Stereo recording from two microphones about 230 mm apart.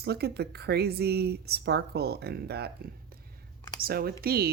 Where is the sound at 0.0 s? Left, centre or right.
Right.